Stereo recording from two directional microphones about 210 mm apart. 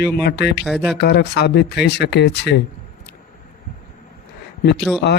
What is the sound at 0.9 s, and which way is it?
Speech, 50° left (ahead or behind).